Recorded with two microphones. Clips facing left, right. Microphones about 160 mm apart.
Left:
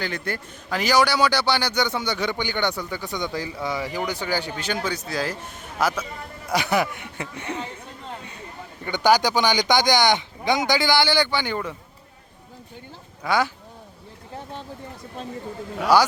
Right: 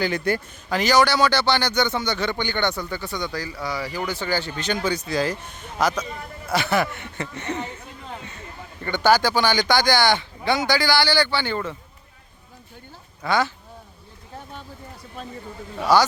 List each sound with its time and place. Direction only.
0.0 s a man's voice: 10° right (ahead or behind)
0.7 s a man's voice: 10° left (ahead or behind)
8.8 s a man's voice: 15° left (ahead or behind)
13.2 s a man's voice: 10° left (ahead or behind)
15.8 s a man's voice: 10° left (ahead or behind)